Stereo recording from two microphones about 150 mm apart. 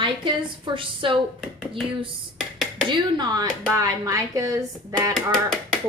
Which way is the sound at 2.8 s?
30° right (ahead or behind).